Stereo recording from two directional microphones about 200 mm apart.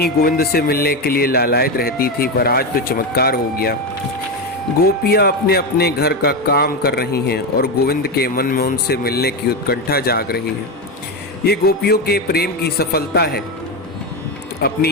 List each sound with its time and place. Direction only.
0.0 s a man's voice: 50° left (ahead or behind)
5.0 s a man's voice: 50° left (ahead or behind)
11.4 s a man's voice: 50° left (ahead or behind)